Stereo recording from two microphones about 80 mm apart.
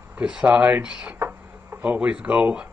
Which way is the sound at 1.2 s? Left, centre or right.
Right.